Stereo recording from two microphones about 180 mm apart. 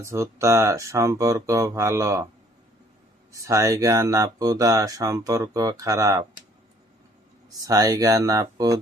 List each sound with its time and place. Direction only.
0.0 s speech: 15° right (ahead or behind)
3.3 s speech: 15° right (ahead or behind)
7.6 s speech: 20° right (ahead or behind)